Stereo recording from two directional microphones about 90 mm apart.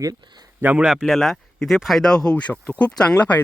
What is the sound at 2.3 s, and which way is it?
Speech, 15° left (ahead or behind).